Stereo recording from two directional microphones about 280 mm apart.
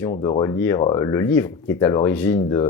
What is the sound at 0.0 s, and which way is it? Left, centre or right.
Speech, centre.